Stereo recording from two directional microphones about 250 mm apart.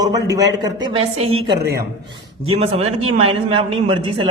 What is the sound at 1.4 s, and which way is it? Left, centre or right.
Speech, right.